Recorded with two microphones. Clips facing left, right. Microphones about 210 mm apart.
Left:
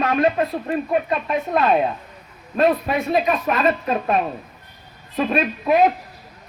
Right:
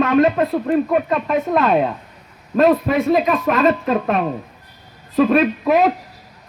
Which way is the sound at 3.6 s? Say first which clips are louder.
Right 4 dB; 65° right (ahead or behind).